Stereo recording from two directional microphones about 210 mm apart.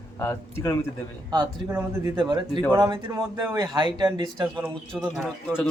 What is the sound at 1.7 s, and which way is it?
A man's voice, 10° right (ahead or behind).